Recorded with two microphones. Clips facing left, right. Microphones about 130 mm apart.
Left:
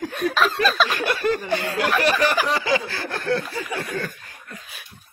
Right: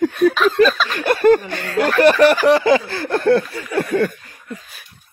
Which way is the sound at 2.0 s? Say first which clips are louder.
Right 11 dB; 60° right (ahead or behind).